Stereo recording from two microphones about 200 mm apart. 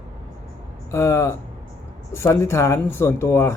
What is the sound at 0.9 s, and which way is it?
Speech, 15° left (ahead or behind).